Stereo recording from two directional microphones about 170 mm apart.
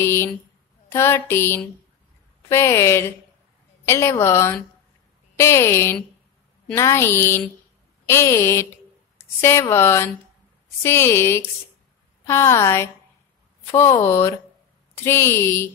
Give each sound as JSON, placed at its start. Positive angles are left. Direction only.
{"t": 0.0, "sound": "a woman's voice", "side_deg": 15}